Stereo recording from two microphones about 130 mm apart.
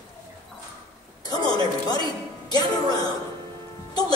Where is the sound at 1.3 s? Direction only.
30° left (ahead or behind).